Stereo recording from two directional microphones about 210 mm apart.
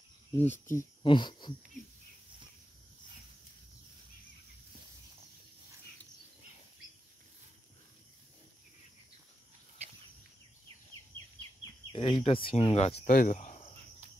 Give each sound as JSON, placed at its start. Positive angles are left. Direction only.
{"t": 0.4, "sound": "speech", "side_deg": 10}
{"t": 1.0, "sound": "speech", "side_deg": 20}
{"t": 11.9, "sound": "speech", "side_deg": 25}
{"t": 12.9, "sound": "speech", "side_deg": 40}